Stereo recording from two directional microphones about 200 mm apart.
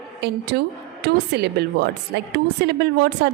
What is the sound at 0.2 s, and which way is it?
A woman's voice, 55° right (ahead or behind).